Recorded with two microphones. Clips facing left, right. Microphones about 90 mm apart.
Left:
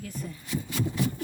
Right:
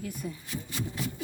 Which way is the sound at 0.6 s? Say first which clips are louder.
Left 6 dB; 90° left.